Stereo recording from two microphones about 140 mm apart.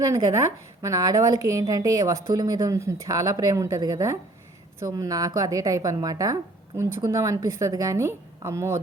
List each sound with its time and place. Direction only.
0.0 s speech: 25° right (ahead or behind)